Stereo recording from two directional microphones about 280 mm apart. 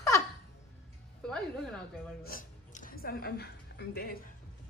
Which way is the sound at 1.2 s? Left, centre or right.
Centre.